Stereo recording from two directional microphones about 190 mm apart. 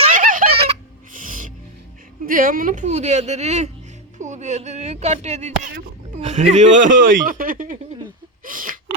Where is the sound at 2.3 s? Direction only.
45° right (ahead or behind).